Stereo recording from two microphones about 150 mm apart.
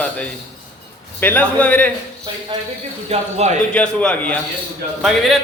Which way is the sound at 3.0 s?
50° right (ahead or behind).